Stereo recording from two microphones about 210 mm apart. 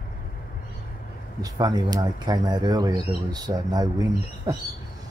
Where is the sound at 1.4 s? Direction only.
20° right (ahead or behind).